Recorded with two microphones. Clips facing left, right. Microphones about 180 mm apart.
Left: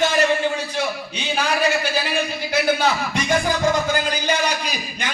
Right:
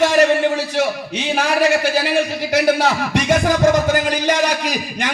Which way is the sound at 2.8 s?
80° right.